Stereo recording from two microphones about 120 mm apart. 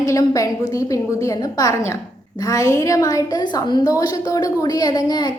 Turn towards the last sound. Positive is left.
turn(degrees=35)  # may be behind; listen again after turning